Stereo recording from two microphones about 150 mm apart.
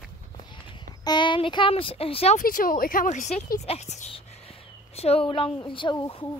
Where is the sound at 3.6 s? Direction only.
45° left (ahead or behind).